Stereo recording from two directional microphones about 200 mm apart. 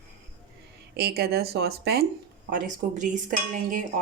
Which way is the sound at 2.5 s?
40° right (ahead or behind).